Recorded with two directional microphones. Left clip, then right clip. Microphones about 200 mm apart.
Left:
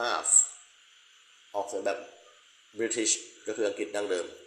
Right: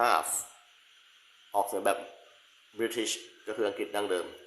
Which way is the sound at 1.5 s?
20° right (ahead or behind).